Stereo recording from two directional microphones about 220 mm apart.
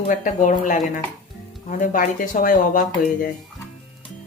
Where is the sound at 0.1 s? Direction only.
35° left (ahead or behind).